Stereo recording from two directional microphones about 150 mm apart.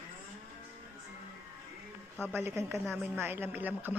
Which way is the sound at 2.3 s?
15° right (ahead or behind).